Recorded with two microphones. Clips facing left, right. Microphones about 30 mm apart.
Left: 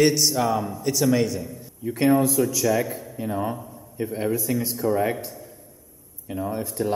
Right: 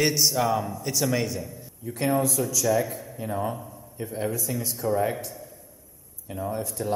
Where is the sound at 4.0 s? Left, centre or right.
Centre.